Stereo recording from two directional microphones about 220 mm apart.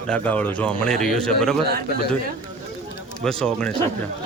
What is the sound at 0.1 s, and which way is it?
A man's voice, 5° left (ahead or behind).